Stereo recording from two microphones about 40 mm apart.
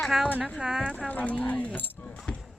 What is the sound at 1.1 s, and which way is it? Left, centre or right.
Speech, left.